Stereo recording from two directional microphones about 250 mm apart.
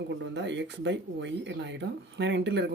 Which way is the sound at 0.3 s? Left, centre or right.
Right.